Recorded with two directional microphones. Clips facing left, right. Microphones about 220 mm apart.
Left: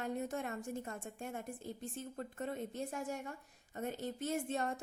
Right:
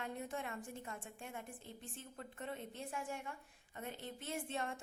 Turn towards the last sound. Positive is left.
turn(degrees=40)  # may be behind; listen again after turning